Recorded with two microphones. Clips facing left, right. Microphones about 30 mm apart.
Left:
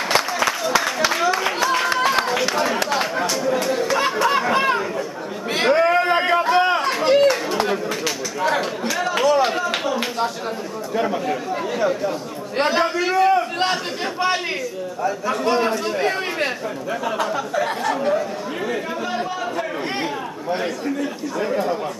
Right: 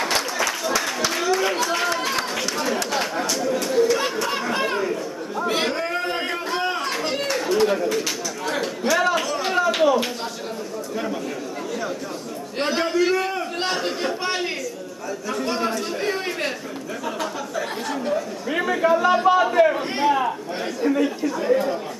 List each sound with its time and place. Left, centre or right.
0.1 s a sound: centre
1.3 s chatter: centre
3.9 s a sound: centre
5.5 s chatter: centre
9.1 s a sound: centre
11.0 s speech: left
12.5 s a man's voice: centre
17.2 s a man's voice: centre
19.2 s a man's voice: right
21.5 s speech: centre